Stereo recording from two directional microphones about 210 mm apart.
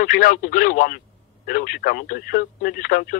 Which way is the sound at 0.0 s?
40° left (ahead or behind).